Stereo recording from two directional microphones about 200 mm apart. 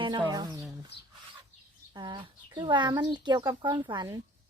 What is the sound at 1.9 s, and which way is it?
Speech, 25° right (ahead or behind).